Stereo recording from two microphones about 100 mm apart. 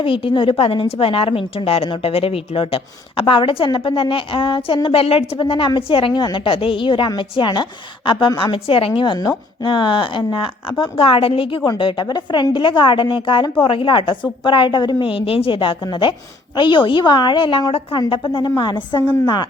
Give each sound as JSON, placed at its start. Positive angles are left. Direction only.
{"t": 0.0, "sound": "a woman's voice", "side_deg": 60}
{"t": 17.9, "sound": "a woman's voice", "side_deg": 50}